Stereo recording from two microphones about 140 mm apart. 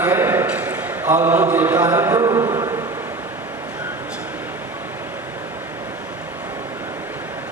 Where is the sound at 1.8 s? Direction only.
20° right (ahead or behind).